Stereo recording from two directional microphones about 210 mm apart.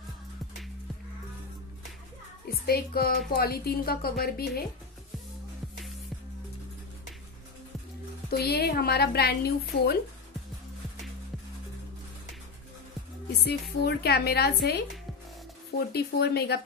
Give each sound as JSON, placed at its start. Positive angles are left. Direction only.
{"t": 2.4, "sound": "a woman's voice", "side_deg": 45}
{"t": 8.3, "sound": "a woman's voice", "side_deg": 50}
{"t": 13.4, "sound": "a woman's voice", "side_deg": 50}
{"t": 15.9, "sound": "a woman's voice", "side_deg": 50}